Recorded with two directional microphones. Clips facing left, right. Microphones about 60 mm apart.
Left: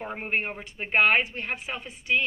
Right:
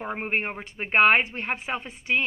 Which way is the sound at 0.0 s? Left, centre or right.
Right.